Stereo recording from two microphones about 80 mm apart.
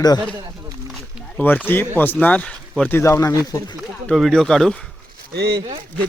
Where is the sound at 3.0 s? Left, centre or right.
Left.